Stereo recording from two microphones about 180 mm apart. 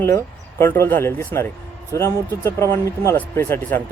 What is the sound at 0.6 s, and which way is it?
Speech, 10° left (ahead or behind).